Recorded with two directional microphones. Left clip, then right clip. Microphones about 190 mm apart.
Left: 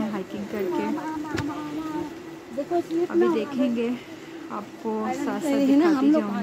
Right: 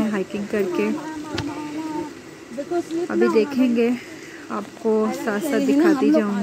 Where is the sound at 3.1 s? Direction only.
25° left (ahead or behind).